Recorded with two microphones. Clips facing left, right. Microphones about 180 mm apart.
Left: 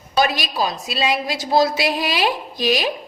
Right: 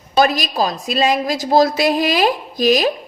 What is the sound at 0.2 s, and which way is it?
Speech, 45° right (ahead or behind).